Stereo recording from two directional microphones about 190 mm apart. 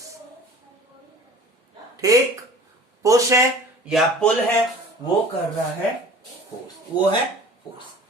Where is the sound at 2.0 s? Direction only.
15° right (ahead or behind).